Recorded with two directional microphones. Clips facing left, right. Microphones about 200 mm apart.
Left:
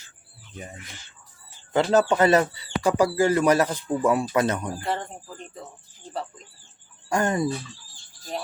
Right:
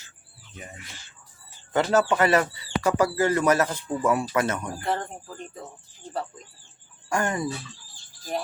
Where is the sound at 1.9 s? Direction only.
20° left (ahead or behind).